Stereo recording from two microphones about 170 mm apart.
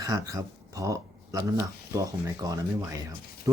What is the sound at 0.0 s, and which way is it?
Speech, 20° right (ahead or behind).